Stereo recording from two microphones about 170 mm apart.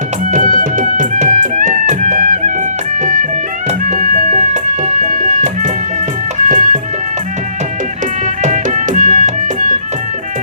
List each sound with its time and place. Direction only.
0.3 s music: 50° right (ahead or behind)
8.4 s music: 50° right (ahead or behind)